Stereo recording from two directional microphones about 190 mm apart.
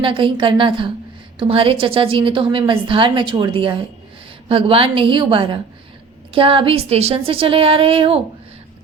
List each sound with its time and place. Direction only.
0.0 s a woman's voice: 25° right (ahead or behind)